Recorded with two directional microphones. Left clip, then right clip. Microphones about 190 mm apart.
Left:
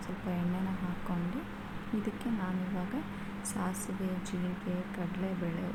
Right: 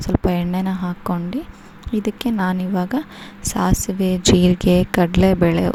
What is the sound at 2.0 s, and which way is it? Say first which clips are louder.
A woman's voice: right 18 dB; 55° right (ahead or behind).